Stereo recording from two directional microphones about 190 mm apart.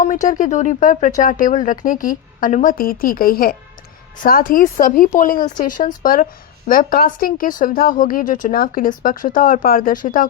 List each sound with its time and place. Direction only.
0.0 s speech: 45° left (ahead or behind)